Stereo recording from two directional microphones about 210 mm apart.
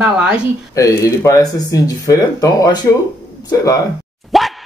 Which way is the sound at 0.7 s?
15° left (ahead or behind).